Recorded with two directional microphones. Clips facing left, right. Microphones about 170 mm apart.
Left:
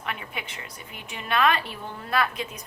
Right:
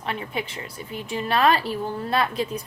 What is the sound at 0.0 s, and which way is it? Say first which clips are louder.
A woman's voice: right 6 dB; 30° right (ahead or behind).